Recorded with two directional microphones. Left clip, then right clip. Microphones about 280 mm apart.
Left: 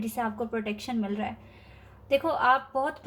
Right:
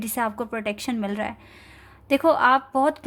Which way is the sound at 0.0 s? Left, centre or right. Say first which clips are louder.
Right 5 dB; right.